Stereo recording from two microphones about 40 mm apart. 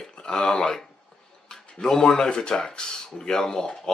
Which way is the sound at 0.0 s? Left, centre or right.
Centre.